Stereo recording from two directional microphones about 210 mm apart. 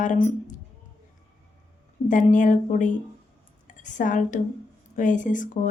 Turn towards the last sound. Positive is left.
turn(degrees=35)  # may be behind; listen again after turning